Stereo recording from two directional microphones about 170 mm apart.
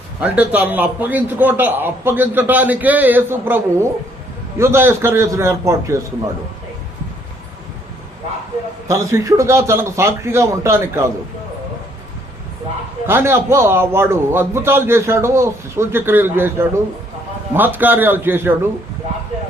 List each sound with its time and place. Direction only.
0.2 s a man's voice: 10° right (ahead or behind)
8.9 s a man's voice: 15° right (ahead or behind)
13.1 s a man's voice: 15° right (ahead or behind)